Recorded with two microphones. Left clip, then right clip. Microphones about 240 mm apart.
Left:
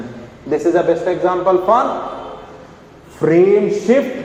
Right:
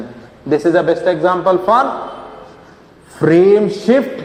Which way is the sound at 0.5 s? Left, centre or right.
Right.